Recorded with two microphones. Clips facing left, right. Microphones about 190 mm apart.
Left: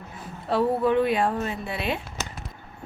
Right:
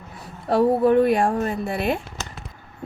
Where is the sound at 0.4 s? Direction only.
45° right (ahead or behind).